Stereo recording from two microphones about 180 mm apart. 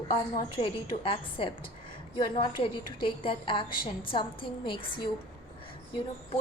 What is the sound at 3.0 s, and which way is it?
A woman's voice, 30° left (ahead or behind).